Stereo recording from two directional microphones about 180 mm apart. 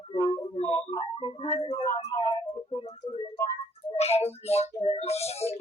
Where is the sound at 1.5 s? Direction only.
35° left (ahead or behind).